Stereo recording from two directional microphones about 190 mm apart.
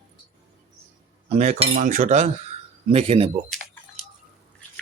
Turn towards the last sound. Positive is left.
turn(degrees=-30)  # may be behind; listen again after turning